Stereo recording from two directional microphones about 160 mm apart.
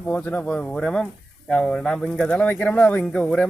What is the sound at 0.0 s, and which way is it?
Speech, 10° left (ahead or behind).